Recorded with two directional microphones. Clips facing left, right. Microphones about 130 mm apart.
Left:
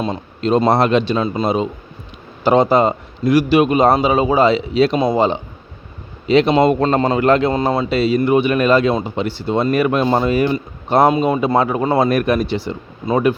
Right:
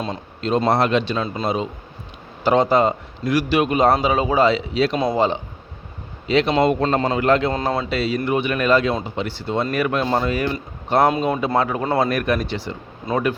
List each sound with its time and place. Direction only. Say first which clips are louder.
0.4 s a man's voice: left 4 dB; 20° left (ahead or behind)
6.7 s a man's voice: left 4 dB; 35° left (ahead or behind)
7.5 s a man's voice: left 5 dB; 10° left (ahead or behind)
11.3 s speech: left 4 dB; 20° left (ahead or behind)